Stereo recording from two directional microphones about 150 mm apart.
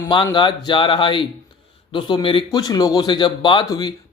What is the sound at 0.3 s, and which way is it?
Speech, 30° left (ahead or behind).